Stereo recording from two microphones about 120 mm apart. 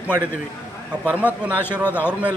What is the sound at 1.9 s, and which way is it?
Speech, 15° left (ahead or behind).